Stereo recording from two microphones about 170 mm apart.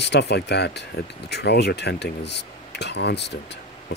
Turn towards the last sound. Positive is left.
turn(degrees=80)